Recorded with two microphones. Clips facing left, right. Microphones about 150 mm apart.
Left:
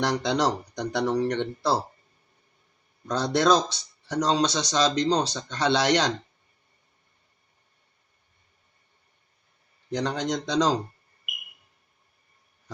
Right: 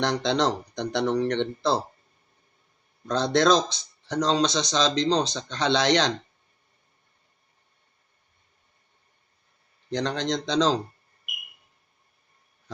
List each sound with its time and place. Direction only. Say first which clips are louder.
0.0 s speech: even; 10° left (ahead or behind)
3.1 s speech: right 1 dB; 10° left (ahead or behind)
9.9 s speech: even; 10° left (ahead or behind)